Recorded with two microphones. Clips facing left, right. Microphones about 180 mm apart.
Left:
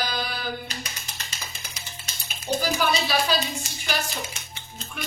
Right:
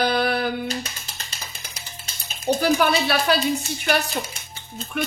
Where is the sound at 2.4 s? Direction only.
60° right (ahead or behind).